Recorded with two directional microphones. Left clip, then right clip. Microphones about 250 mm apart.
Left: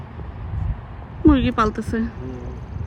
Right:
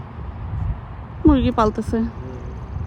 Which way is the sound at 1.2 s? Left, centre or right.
Centre.